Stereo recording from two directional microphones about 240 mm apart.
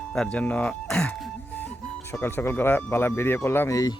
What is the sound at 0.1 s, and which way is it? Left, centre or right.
Speech, centre.